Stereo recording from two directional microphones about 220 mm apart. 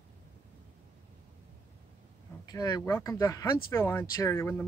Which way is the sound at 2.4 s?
15° left (ahead or behind).